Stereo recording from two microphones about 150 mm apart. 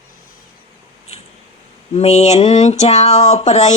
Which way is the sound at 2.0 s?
45° left (ahead or behind).